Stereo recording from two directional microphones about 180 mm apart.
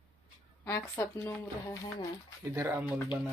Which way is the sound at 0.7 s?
15° left (ahead or behind).